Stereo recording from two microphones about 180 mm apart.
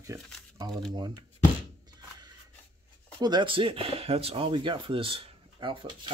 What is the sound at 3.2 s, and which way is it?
Speech, 25° right (ahead or behind).